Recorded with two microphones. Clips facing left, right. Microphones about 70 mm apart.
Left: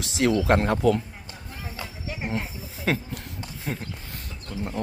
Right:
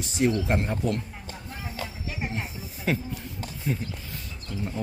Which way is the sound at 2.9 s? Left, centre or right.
Left.